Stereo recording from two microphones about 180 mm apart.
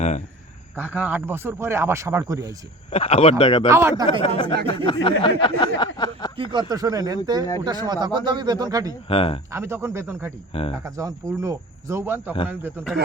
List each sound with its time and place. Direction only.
0.8 s speech: 10° right (ahead or behind)
2.9 s speech: 35° left (ahead or behind)
3.7 s speech: 15° right (ahead or behind)
4.4 s a sound: 25° left (ahead or behind)
6.3 s speech: 30° right (ahead or behind)
9.0 s speech: 30° left (ahead or behind)
9.5 s speech: 15° right (ahead or behind)
10.5 s speech: 35° left (ahead or behind)
10.8 s speech: 20° right (ahead or behind)